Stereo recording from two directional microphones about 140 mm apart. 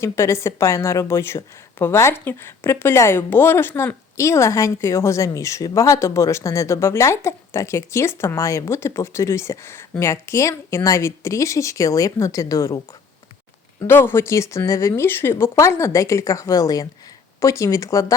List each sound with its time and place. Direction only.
0.0 s a woman's voice: 20° left (ahead or behind)
13.8 s a woman's voice: 15° left (ahead or behind)